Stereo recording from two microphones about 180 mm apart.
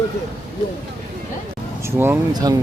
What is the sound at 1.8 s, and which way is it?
Speech, 15° right (ahead or behind).